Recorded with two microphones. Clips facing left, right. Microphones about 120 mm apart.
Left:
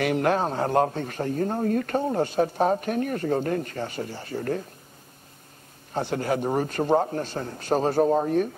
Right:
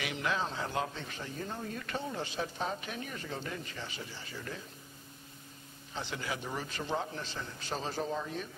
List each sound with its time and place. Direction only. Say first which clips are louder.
0.0 s a man's voice: left 12 dB; 55° left (ahead or behind)
5.9 s a man's voice: left 13 dB; 50° left (ahead or behind)